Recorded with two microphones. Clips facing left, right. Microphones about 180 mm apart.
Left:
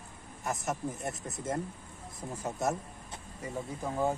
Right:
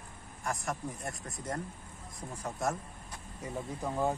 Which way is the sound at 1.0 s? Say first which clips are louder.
Left 4 dB; 25° left (ahead or behind).